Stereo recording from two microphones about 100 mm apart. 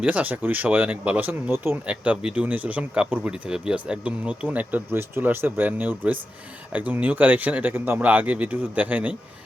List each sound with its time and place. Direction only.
0.0 s speech: 15° right (ahead or behind)